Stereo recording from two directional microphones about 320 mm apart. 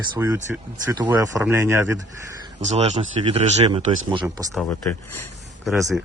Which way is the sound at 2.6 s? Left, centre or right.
Right.